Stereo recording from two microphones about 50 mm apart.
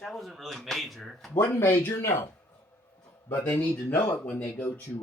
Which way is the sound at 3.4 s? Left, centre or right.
Left.